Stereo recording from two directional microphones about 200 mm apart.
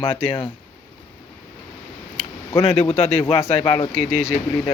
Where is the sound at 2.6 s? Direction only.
30° left (ahead or behind).